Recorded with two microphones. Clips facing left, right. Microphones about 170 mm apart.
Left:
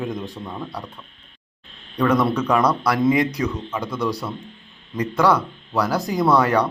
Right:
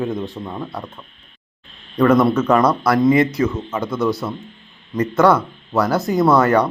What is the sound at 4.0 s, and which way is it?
Speech, 15° left (ahead or behind).